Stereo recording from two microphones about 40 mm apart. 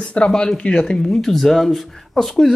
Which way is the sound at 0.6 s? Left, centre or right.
Left.